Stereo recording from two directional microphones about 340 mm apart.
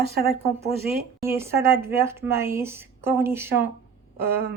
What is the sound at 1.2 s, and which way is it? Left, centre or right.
A woman's voice, centre.